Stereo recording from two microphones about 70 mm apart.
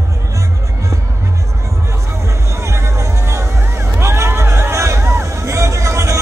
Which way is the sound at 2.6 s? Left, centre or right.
Right.